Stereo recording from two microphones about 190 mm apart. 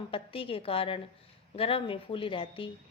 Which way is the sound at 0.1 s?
30° left (ahead or behind).